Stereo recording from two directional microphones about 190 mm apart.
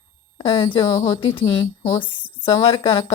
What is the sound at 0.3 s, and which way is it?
Speech, 25° left (ahead or behind).